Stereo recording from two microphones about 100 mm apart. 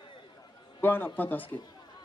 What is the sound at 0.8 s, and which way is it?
Speech, 20° left (ahead or behind).